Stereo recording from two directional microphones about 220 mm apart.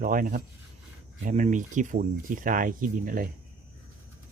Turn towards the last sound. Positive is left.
turn(degrees=-40)  # may be behind; listen again after turning